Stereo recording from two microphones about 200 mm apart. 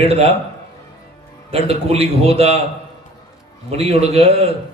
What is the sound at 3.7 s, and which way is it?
Speech, 30° right (ahead or behind).